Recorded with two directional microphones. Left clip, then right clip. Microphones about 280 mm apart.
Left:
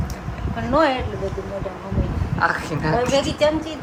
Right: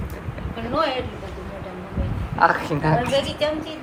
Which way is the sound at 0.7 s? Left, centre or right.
Left.